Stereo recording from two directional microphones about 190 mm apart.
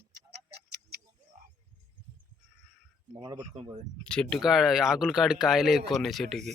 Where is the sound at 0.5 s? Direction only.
55° right (ahead or behind).